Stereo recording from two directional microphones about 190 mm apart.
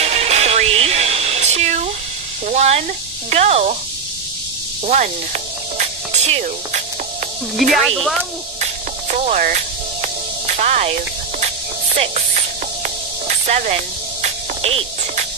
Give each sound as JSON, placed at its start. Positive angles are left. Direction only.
{"t": 0.0, "sound": "music", "side_deg": -35}
{"t": 2.4, "sound": "sizzle", "side_deg": -35}
{"t": 3.3, "sound": "speech", "side_deg": -35}
{"t": 4.8, "sound": "music", "side_deg": -40}
{"t": 7.7, "sound": "speech", "side_deg": 0}
{"t": 9.1, "sound": "music", "side_deg": -40}